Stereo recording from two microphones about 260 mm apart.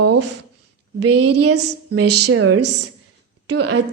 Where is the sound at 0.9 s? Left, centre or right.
Right.